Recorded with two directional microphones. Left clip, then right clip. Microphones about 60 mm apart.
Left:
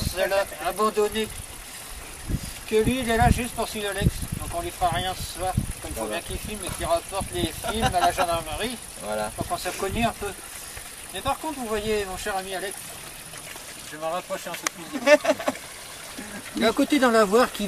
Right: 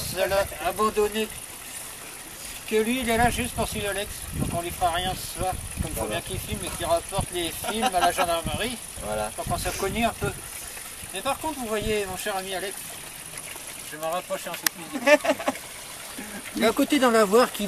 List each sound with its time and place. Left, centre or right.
0.1 s speech: centre
2.7 s speech: centre
9.0 s speech: centre
9.5 s speech: centre
13.9 s speech: centre